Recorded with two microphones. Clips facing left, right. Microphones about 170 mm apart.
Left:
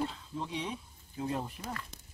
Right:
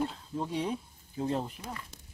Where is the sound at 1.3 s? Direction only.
20° right (ahead or behind).